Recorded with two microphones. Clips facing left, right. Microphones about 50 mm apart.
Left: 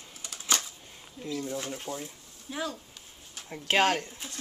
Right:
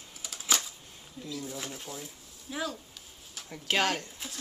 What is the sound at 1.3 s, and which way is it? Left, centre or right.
Speech, centre.